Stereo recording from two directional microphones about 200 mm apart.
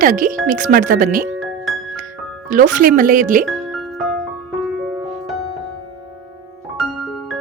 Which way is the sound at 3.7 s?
Centre (ahead or behind).